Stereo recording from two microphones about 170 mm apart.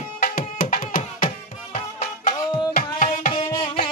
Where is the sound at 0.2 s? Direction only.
60° left (ahead or behind).